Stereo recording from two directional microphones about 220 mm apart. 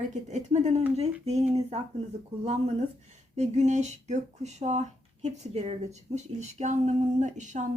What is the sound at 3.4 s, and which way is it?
Speech, 30° right (ahead or behind).